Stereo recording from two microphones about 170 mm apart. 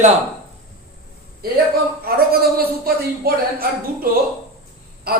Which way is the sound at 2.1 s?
65° right (ahead or behind).